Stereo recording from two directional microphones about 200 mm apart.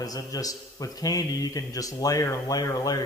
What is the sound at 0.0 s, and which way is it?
A man's voice, 20° left (ahead or behind).